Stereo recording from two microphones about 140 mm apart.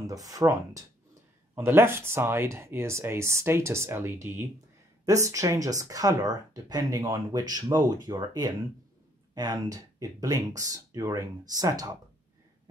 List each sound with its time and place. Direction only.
0.0 s speech: 25° right (ahead or behind)